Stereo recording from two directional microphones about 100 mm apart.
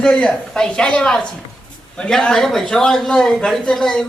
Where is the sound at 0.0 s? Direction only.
10° left (ahead or behind).